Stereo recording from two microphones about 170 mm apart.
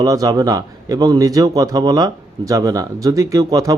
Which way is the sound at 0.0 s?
20° right (ahead or behind).